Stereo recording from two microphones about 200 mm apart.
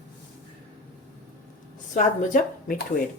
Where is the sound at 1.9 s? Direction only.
40° left (ahead or behind).